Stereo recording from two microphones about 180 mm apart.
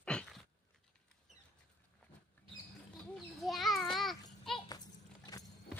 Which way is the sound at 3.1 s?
Centre (ahead or behind).